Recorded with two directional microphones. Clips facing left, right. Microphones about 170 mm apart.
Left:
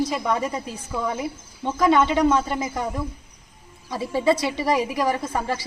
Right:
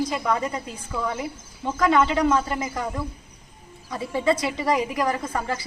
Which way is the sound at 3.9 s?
30° left (ahead or behind).